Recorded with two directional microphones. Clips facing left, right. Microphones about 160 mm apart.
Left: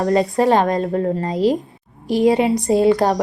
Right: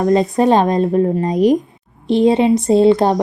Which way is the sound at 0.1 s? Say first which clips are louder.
Right 2 dB; 20° right (ahead or behind).